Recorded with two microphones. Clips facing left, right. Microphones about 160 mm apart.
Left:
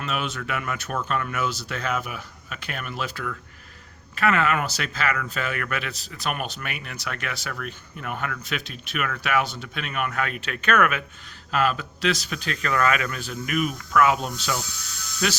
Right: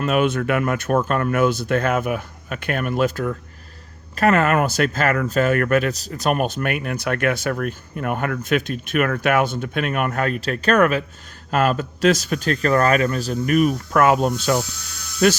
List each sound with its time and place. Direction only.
0.0 s speech: 50° right (ahead or behind); by 11.0 s 35° right (ahead or behind)
11.5 s speech: 45° right (ahead or behind)